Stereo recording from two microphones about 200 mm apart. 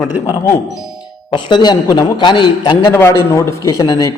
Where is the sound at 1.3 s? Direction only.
20° left (ahead or behind).